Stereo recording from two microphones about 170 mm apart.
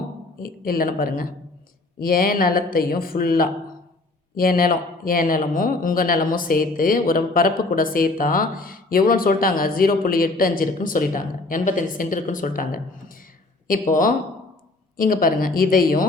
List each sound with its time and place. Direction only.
0.3 s speech: 60° left (ahead or behind)